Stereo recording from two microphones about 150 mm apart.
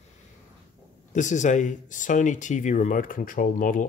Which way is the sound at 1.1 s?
55° left (ahead or behind).